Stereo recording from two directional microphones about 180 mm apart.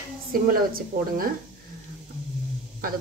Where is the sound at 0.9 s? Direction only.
50° right (ahead or behind).